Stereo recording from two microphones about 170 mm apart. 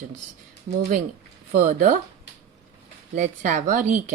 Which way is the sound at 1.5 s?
50° right (ahead or behind).